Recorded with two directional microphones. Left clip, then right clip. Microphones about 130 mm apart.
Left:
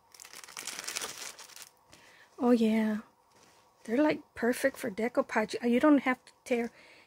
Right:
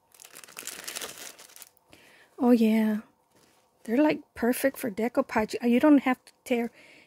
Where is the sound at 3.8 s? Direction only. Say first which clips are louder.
Right 4 dB; 45° right (ahead or behind).